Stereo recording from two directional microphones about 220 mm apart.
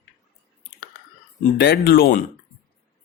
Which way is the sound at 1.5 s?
45° left (ahead or behind).